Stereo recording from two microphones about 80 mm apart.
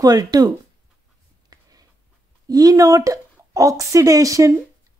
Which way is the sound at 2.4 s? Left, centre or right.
Right.